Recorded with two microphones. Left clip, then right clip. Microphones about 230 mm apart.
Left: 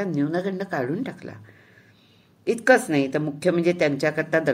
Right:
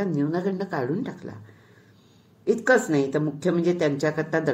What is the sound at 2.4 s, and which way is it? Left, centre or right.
Speech, left.